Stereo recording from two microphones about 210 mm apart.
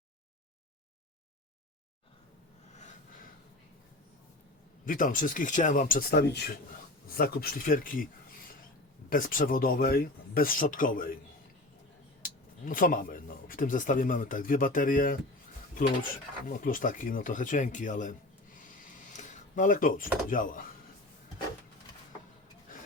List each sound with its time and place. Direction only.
4.9 s a man's voice: 40° left (ahead or behind)
9.0 s speech: 40° left (ahead or behind)
12.2 s speech: 40° left (ahead or behind)
16.5 s a man's voice: 40° left (ahead or behind)